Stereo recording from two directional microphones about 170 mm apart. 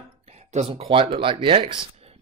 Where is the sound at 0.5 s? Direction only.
35° right (ahead or behind).